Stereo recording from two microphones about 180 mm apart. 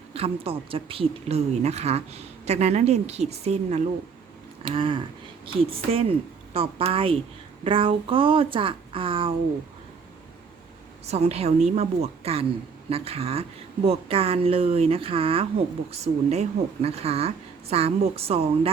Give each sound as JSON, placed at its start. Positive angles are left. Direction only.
{"t": 0.1, "sound": "speech", "side_deg": -30}
{"t": 11.0, "sound": "speech", "side_deg": -35}